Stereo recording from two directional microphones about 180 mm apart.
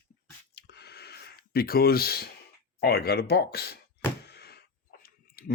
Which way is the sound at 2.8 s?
60° left (ahead or behind).